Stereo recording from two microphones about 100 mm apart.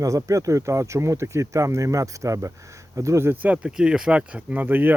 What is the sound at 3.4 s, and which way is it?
Speech, 15° right (ahead or behind).